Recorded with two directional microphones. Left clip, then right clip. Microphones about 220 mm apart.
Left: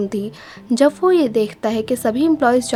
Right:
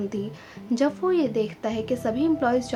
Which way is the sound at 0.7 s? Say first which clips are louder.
Left 9 dB; 45° left (ahead or behind).